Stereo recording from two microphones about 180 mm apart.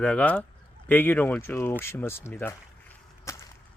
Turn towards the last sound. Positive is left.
turn(degrees=15)  # may be behind; listen again after turning